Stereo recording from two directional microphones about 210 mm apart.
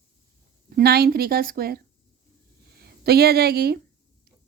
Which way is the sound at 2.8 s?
50° right (ahead or behind).